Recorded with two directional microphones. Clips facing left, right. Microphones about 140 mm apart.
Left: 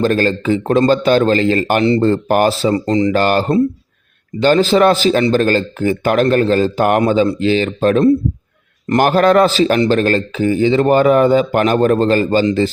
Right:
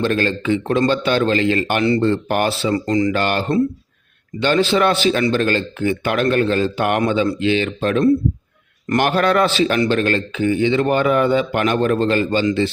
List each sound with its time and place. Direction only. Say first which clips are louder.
0.0 s a man's voice: left 4 dB; 40° left (ahead or behind)